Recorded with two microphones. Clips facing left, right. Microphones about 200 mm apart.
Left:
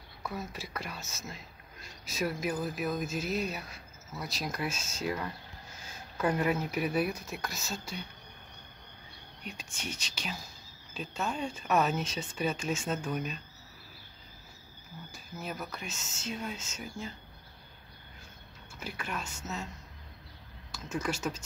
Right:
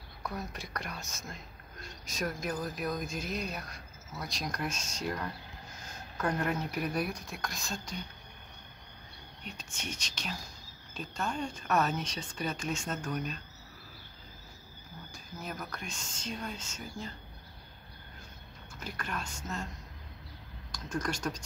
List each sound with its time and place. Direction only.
0.2 s speech: centre (ahead or behind)
9.6 s speech: 10° left (ahead or behind)
15.4 s speech: 5° left (ahead or behind)
18.8 s speech: 5° left (ahead or behind)
20.7 s speech: 5° left (ahead or behind)